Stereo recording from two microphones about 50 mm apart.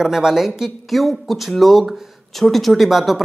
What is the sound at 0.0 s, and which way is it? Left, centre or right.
Speech, centre.